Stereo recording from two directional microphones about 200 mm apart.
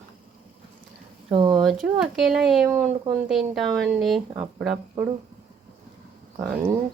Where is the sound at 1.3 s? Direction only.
25° right (ahead or behind).